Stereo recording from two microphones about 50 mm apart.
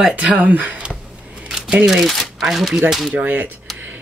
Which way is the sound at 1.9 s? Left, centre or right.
Centre.